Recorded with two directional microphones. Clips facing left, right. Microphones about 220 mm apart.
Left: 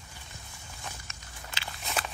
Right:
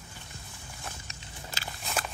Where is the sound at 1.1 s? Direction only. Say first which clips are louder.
Right 2 dB; 35° right (ahead or behind).